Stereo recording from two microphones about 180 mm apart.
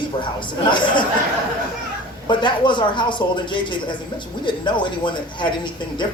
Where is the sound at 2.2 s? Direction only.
25° left (ahead or behind).